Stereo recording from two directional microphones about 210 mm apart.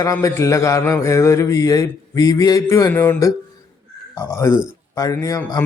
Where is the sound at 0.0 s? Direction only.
15° left (ahead or behind).